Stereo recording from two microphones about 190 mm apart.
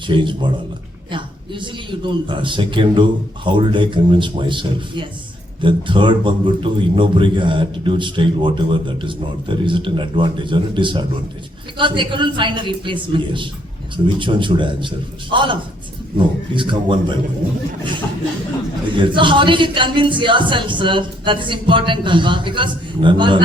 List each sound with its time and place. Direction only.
0.1 s a man's voice: 25° right (ahead or behind)
18.9 s a man's voice: 25° right (ahead or behind)